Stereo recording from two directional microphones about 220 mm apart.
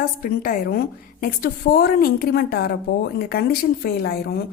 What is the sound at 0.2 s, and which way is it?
A woman's voice, 40° left (ahead or behind).